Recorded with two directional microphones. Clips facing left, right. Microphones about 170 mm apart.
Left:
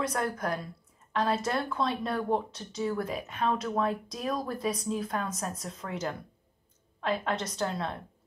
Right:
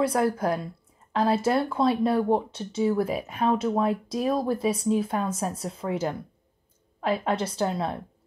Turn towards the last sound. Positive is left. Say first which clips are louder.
# right 5 dB
turn(degrees=-30)  # may be behind; listen again after turning